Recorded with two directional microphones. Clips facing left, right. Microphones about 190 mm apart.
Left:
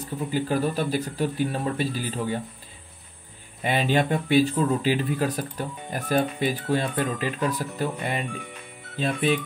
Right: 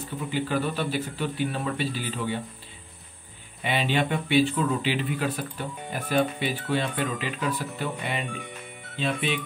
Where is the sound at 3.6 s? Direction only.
40° left (ahead or behind).